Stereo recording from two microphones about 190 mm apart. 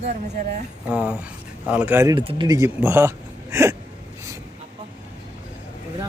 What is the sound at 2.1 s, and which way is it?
Speech, 20° right (ahead or behind).